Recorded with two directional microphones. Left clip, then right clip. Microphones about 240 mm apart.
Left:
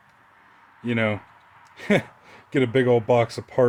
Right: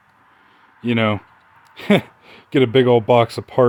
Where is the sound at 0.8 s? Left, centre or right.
Right.